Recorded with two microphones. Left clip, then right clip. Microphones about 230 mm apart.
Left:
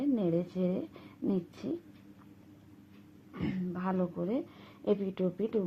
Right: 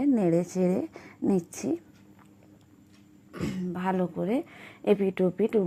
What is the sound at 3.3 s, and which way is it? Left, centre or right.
Speech, right.